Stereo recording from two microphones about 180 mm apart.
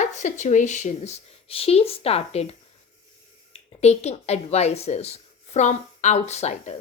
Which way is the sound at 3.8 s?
35° left (ahead or behind).